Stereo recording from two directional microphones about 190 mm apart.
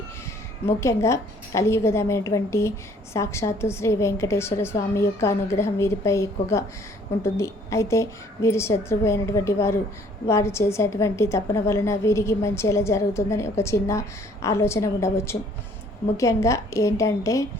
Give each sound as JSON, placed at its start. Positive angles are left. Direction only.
{"t": 0.6, "sound": "a woman's voice", "side_deg": 15}